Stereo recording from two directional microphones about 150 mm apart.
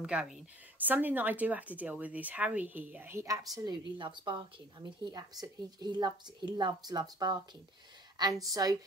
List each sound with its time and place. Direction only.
0.0 s a woman's voice: 5° right (ahead or behind); by 8.7 s 25° right (ahead or behind)